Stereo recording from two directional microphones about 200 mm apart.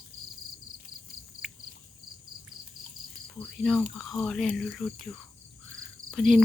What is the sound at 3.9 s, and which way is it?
Speech, centre (ahead or behind).